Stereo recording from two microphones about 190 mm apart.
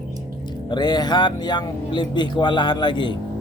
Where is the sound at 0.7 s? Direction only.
20° left (ahead or behind).